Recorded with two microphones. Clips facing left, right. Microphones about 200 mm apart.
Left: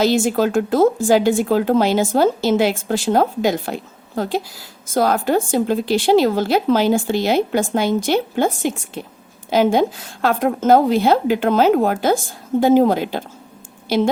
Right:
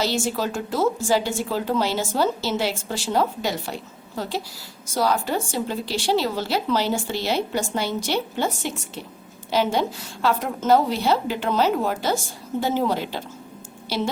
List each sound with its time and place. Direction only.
0.3 s a woman's voice: 55° left (ahead or behind)